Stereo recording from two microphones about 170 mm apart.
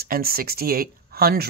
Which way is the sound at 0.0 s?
60° right (ahead or behind).